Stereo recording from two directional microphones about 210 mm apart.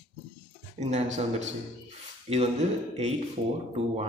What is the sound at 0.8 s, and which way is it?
A man's voice, 35° right (ahead or behind).